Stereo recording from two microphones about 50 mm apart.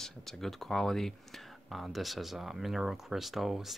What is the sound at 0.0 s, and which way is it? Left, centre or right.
Speech, centre.